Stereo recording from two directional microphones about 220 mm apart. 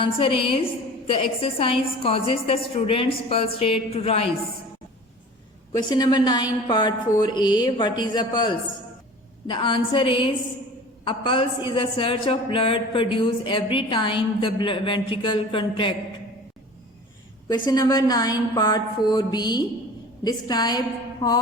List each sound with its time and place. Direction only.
0.0 s a woman's voice: 25° left (ahead or behind)
5.7 s a woman's voice: 20° left (ahead or behind)
17.7 s a woman's voice: 15° left (ahead or behind)